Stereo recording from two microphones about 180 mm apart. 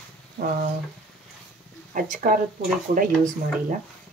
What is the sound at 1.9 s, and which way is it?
Speech, 45° right (ahead or behind).